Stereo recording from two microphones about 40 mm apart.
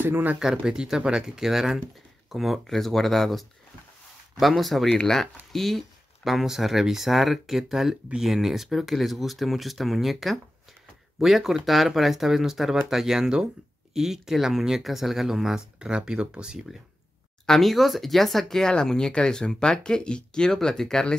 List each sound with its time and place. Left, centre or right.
0.0 s speech: right
0.6 s speech: centre
2.6 s speech: centre
4.8 s speech: centre
15.8 s speech: right
17.5 s speech: centre
18.6 s speech: centre